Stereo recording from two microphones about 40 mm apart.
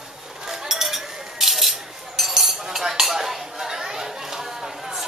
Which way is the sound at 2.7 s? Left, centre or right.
Centre.